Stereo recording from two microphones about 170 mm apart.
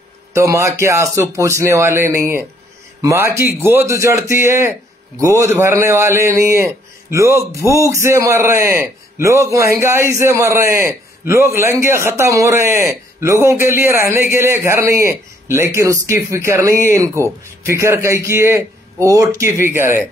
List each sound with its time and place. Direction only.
0.3 s a man's voice: 15° right (ahead or behind)